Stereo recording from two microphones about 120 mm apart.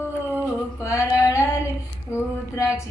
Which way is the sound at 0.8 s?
25° left (ahead or behind).